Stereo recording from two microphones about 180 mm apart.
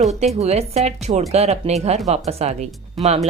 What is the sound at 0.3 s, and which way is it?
Speech, 35° right (ahead or behind).